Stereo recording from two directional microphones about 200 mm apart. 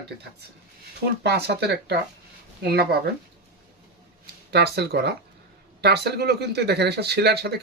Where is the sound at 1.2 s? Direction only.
55° right (ahead or behind).